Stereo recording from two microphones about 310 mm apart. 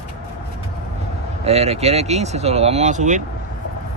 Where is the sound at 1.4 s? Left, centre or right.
Centre.